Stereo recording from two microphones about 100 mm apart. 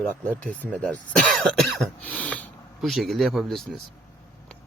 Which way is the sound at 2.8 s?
Centre (ahead or behind).